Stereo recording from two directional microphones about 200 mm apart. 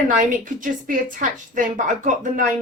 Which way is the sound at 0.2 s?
40° right (ahead or behind).